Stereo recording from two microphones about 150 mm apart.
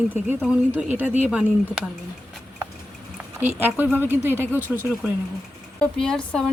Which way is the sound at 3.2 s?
10° right (ahead or behind).